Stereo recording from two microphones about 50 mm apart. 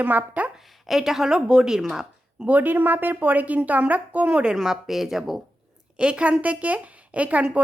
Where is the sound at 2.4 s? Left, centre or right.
Right.